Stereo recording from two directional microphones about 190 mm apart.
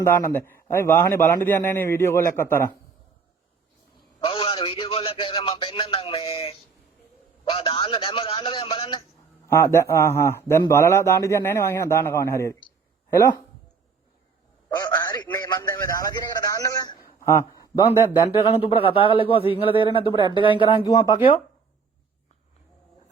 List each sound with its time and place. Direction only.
0.0 s a man's voice: 15° left (ahead or behind)
4.2 s a man's voice: 30° left (ahead or behind)
9.5 s a man's voice: 15° left (ahead or behind)
14.8 s a man's voice: 20° left (ahead or behind)
17.0 s a sound: 50° left (ahead or behind)
17.2 s a sound: 15° left (ahead or behind)
18.1 s a man's voice: 25° left (ahead or behind)